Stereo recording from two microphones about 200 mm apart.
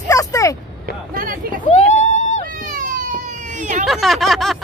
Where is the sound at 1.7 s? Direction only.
35° left (ahead or behind).